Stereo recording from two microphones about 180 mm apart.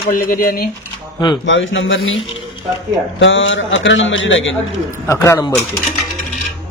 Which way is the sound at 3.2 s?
90° left.